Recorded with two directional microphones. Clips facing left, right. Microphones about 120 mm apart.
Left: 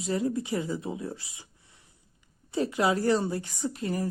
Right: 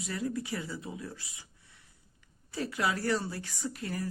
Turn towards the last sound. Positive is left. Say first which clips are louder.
# left 6 dB
turn(degrees=20)  # may be behind; listen again after turning